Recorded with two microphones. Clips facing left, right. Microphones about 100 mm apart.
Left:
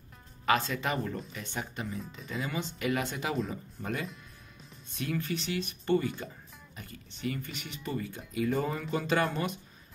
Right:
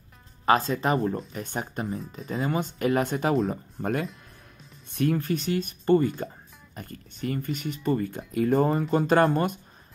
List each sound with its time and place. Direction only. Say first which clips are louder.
0.5 s speech: right 6 dB; 40° right (ahead or behind)